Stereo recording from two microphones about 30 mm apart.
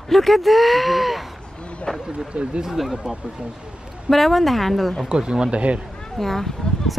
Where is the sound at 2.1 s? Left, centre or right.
Right.